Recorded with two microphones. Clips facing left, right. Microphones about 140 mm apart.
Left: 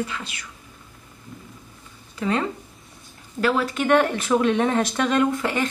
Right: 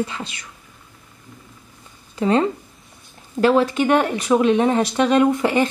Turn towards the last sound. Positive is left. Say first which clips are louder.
# right 5 dB
turn(degrees=-25)  # may be behind; listen again after turning